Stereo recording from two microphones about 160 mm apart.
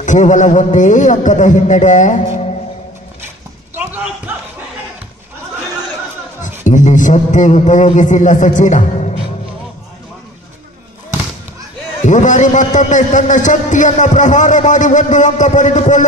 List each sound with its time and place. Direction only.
0.0 s a man's voice: 50° left (ahead or behind)
6.6 s a man's voice: 50° left (ahead or behind)
12.0 s a man's voice: 50° left (ahead or behind)